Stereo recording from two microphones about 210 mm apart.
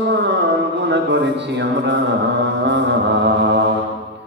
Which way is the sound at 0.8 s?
55° right (ahead or behind).